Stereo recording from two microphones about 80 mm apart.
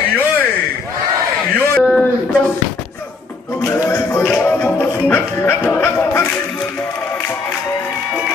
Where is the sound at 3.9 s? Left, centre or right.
Left.